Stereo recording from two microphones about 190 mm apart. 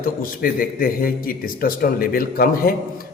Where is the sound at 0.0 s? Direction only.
50° left (ahead or behind).